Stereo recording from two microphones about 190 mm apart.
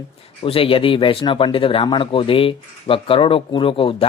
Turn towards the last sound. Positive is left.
turn(degrees=30)  # may be behind; listen again after turning